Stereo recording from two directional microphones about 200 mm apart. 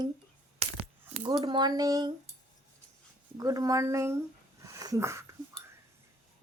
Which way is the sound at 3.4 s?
20° right (ahead or behind).